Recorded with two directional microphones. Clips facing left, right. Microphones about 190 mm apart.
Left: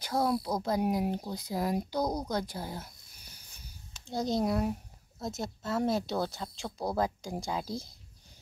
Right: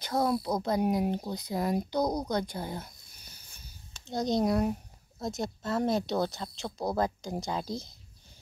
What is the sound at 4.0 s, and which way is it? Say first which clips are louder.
Speech: right 2 dB; 5° left (ahead or behind).